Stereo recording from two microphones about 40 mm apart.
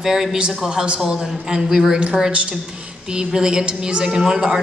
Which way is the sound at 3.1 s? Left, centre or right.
Centre.